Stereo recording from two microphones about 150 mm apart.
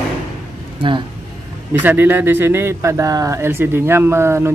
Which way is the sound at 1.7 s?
15° right (ahead or behind).